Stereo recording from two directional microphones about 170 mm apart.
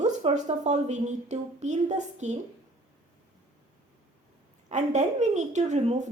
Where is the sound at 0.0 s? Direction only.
40° right (ahead or behind).